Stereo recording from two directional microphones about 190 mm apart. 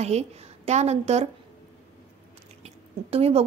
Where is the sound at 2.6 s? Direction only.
30° right (ahead or behind).